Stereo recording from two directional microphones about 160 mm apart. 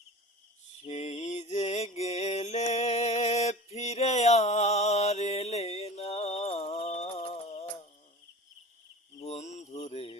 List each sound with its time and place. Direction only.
0.9 s mantra: 45° left (ahead or behind)
9.1 s mantra: 45° left (ahead or behind)